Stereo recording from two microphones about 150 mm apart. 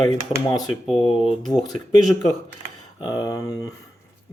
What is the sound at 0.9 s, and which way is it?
Speech, 40° left (ahead or behind).